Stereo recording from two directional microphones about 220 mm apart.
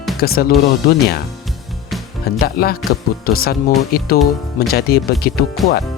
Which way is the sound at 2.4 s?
45° left (ahead or behind).